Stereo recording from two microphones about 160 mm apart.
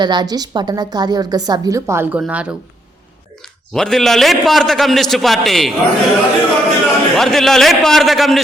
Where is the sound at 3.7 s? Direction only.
Centre (ahead or behind).